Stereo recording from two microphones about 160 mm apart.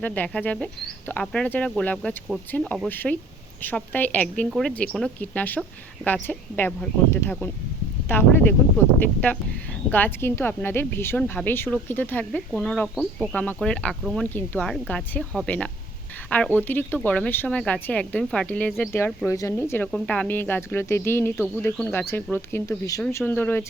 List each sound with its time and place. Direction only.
0.0 s speech: 10° left (ahead or behind)
9.9 s speech: 15° left (ahead or behind)
21.3 s speech: 5° right (ahead or behind)
21.6 s speech: 10° left (ahead or behind)